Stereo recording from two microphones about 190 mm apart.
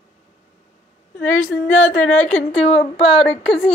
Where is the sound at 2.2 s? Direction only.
35° left (ahead or behind).